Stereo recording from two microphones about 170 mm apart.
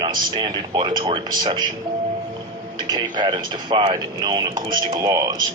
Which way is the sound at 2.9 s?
25° right (ahead or behind).